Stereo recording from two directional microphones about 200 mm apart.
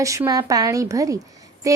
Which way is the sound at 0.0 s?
15° right (ahead or behind).